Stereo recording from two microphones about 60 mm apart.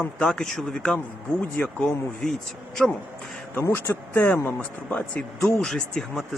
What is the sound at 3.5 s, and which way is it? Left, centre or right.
A man's voice, left.